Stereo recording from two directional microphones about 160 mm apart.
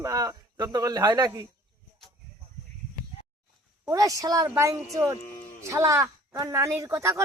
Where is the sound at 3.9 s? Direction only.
20° right (ahead or behind).